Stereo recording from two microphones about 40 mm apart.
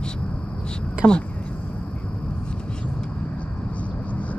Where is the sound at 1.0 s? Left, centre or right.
Right.